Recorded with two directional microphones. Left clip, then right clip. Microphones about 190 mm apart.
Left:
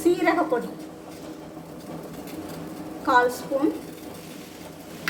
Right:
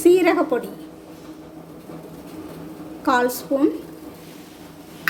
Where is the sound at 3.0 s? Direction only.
45° right (ahead or behind).